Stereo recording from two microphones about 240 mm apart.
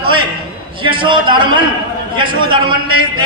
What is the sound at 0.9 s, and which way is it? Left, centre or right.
A man's voice, centre.